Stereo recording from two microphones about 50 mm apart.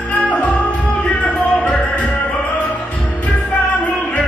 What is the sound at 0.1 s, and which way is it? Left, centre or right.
Music, left.